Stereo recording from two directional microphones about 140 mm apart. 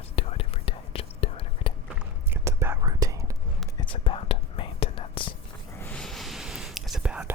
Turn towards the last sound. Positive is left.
turn(degrees=-5)  # may be behind; listen again after turning